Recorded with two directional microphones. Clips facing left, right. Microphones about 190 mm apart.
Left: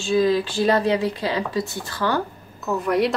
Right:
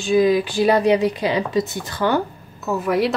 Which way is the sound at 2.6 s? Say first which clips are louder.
Right 1 dB; 5° right (ahead or behind).